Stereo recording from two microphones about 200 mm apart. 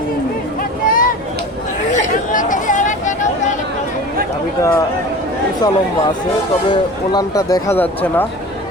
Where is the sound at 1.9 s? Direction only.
40° left (ahead or behind).